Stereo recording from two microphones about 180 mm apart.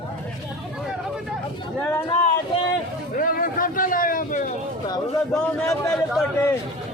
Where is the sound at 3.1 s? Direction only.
50° left (ahead or behind).